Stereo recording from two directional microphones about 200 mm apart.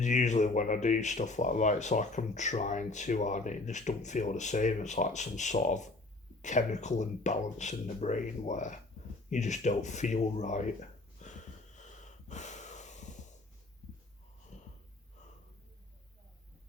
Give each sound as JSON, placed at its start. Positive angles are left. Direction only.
{"t": 0.0, "sound": "speech", "side_deg": 35}
{"t": 11.2, "sound": "wheeze", "side_deg": 35}
{"t": 14.5, "sound": "wheeze", "side_deg": 35}